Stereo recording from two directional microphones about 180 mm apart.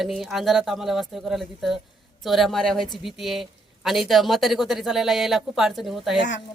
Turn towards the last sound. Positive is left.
turn(degrees=0)  # may be behind; listen again after turning